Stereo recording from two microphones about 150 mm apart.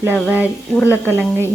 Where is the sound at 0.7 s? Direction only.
15° left (ahead or behind).